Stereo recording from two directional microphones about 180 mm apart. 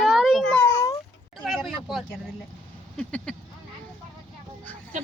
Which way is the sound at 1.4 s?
Centre (ahead or behind).